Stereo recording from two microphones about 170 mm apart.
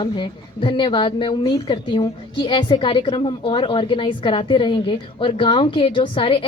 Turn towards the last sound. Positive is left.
turn(degrees=30)  # may be behind; listen again after turning